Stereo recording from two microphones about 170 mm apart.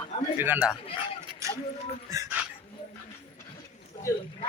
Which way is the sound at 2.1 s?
20° right (ahead or behind).